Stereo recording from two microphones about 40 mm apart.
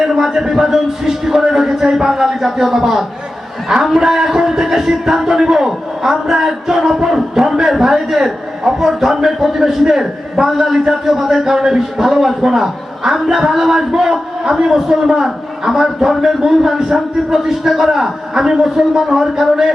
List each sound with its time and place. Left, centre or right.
0.0 s a man's voice: centre